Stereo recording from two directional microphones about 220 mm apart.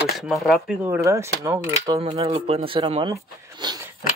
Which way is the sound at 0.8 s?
15° right (ahead or behind).